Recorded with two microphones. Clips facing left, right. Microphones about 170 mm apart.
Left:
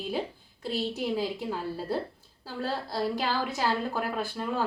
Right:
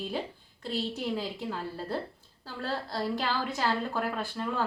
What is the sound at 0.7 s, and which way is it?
A woman's voice, 5° left (ahead or behind).